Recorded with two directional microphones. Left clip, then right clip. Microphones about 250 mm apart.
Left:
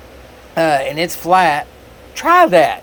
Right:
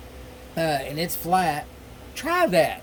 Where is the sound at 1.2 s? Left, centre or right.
Centre.